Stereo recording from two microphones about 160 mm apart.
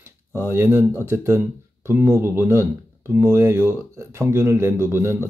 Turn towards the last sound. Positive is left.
turn(degrees=-15)  # may be behind; listen again after turning